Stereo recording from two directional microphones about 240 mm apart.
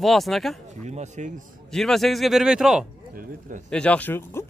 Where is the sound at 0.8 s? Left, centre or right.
Right.